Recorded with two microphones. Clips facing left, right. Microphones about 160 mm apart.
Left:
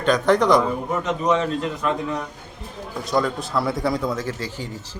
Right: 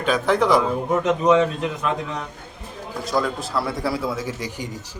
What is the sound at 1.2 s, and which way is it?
Speech, 15° right (ahead or behind).